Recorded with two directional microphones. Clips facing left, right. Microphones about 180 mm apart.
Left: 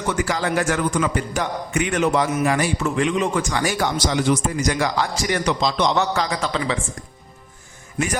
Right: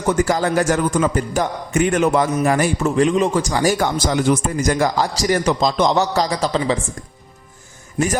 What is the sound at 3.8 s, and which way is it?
A man's voice, 45° right (ahead or behind).